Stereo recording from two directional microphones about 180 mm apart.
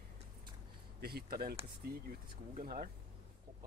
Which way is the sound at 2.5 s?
50° right (ahead or behind).